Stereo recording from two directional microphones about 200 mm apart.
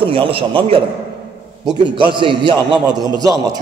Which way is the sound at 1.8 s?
25° right (ahead or behind).